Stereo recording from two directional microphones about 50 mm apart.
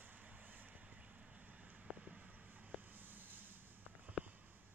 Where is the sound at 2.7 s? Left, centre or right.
Right.